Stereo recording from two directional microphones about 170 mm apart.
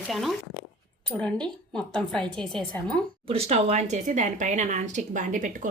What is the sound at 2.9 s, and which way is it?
A woman's voice, 35° right (ahead or behind).